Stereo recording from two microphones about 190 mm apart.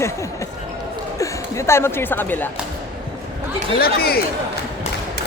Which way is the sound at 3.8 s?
55° left (ahead or behind).